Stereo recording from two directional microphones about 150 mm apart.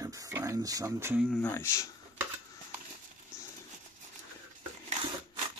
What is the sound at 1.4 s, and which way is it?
Speech, 15° left (ahead or behind).